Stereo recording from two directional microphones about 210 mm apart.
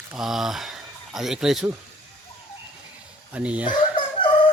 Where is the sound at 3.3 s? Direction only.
5° right (ahead or behind).